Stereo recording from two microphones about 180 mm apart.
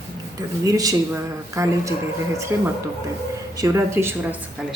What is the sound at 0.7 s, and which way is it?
Speech, 20° right (ahead or behind).